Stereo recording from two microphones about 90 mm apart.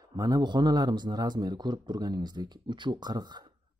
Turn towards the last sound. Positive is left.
turn(degrees=-50)  # may be behind; listen again after turning